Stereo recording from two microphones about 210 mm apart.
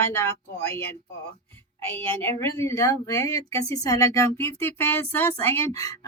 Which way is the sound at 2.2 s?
10° left (ahead or behind).